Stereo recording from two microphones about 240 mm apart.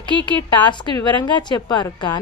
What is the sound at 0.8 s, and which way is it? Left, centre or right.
Speech, centre.